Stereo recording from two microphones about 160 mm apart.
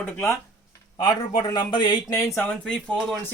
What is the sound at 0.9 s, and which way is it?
Speech, 25° left (ahead or behind).